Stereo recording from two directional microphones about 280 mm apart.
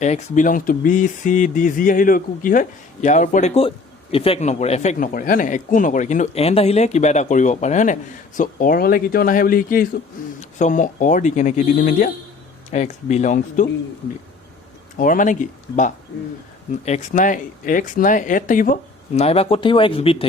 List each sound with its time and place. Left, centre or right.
0.0 s speech: left
14.9 s speech: left